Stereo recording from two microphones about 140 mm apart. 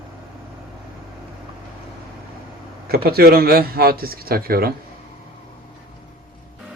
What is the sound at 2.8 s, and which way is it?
Speech, 90° right.